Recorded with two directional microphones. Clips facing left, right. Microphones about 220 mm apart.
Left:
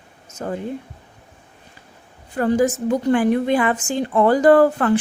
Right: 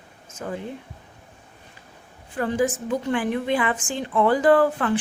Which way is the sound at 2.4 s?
40° left (ahead or behind).